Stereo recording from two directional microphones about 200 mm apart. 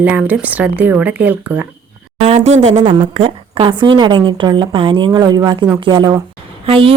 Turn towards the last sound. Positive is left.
turn(degrees=-25)  # may be behind; listen again after turning